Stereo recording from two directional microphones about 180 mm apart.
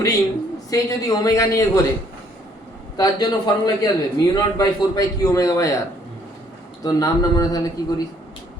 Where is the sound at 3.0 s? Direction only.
20° left (ahead or behind).